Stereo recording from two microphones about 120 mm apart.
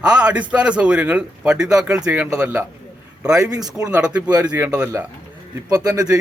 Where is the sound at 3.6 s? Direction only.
35° right (ahead or behind).